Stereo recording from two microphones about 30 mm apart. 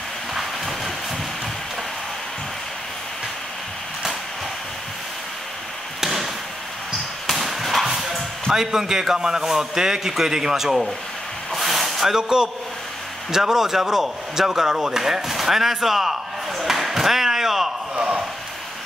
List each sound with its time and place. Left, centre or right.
0.3 s train: centre
5.9 s a sound: centre
7.8 s music: centre
9.1 s a man's voice: right
11.5 s vehicle: centre
12.1 s a man's voice: right
15.0 s slam: centre
17.9 s a sound: right